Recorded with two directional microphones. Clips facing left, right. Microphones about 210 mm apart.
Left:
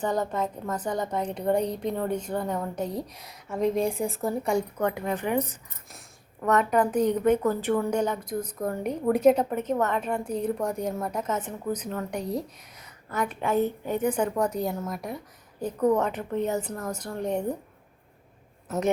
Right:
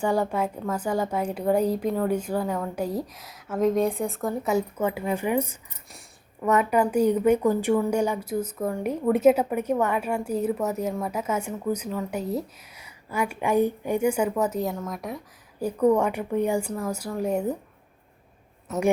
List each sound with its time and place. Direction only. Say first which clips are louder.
0.0 s a woman's voice: right 3 dB; 10° right (ahead or behind)
15.6 s a woman's voice: right 3 dB; 10° right (ahead or behind)
18.7 s a woman's voice: right 1 dB; centre (ahead or behind)